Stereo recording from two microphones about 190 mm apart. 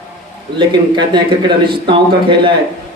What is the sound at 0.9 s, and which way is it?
Speech, 25° right (ahead or behind).